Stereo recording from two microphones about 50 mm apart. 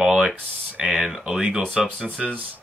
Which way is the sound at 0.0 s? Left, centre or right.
Centre.